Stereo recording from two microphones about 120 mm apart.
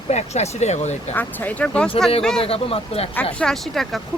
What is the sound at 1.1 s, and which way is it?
Speech, 15° left (ahead or behind).